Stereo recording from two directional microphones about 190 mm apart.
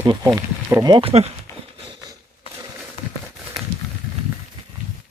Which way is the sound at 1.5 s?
15° left (ahead or behind).